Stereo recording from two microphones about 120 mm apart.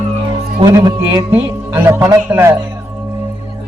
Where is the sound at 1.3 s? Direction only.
15° right (ahead or behind).